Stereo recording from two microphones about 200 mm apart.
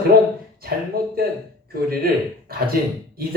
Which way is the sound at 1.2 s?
50° right (ahead or behind).